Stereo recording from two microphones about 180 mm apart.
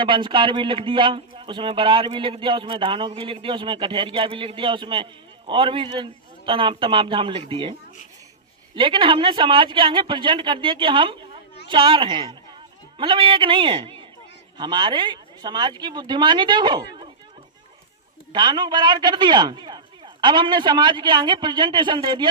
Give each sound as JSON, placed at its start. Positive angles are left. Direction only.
{"t": 0.0, "sound": "speech", "side_deg": -25}
{"t": 18.3, "sound": "speech", "side_deg": -25}